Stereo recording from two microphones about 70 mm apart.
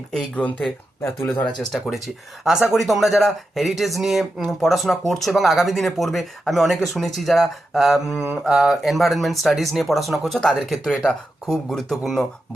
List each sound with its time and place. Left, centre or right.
0.3 s speech: centre
2.4 s speech: centre